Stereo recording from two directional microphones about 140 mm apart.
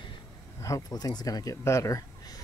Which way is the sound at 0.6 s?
25° left (ahead or behind).